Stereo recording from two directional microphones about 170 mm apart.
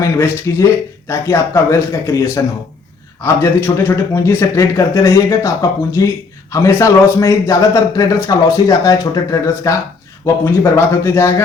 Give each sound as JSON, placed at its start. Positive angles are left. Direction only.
{"t": 0.0, "sound": "a man's voice", "side_deg": 15}